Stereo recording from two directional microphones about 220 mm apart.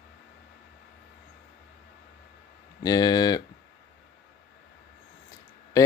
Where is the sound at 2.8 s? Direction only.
20° left (ahead or behind).